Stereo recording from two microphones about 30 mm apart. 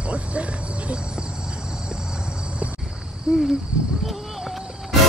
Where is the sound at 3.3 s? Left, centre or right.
Centre.